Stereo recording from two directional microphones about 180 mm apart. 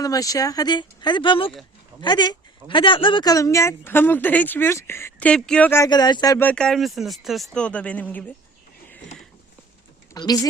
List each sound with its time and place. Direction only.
0.0 s speech: 20° left (ahead or behind)
6.4 s a man's voice: 5° left (ahead or behind)
10.2 s speech: 20° left (ahead or behind)